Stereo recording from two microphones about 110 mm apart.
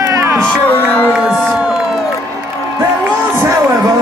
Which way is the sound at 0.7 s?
15° left (ahead or behind).